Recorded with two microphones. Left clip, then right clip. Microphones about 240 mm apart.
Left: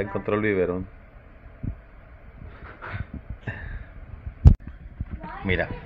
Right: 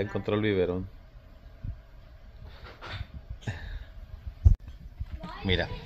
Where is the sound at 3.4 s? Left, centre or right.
Centre.